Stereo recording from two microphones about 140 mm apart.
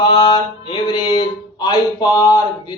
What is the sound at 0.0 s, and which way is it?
Mantra, 30° left (ahead or behind).